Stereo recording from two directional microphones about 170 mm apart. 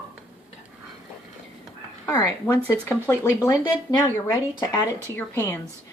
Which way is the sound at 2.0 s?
20° left (ahead or behind).